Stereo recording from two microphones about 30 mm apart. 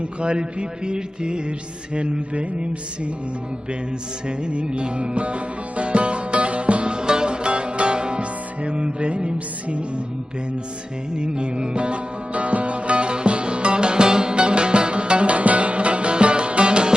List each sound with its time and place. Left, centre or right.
0.2 s mantra: right
4.3 s music: right
11.2 s music: right